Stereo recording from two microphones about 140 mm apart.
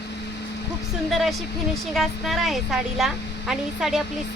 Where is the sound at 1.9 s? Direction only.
Centre (ahead or behind).